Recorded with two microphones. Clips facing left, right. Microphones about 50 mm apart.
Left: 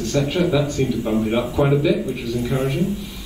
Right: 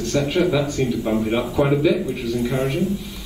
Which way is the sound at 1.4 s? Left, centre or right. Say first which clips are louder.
Even; centre.